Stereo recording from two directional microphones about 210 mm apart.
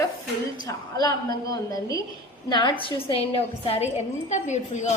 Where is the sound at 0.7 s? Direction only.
20° left (ahead or behind).